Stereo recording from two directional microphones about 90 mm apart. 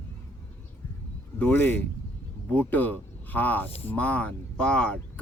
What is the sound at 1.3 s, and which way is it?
Speech, 20° left (ahead or behind).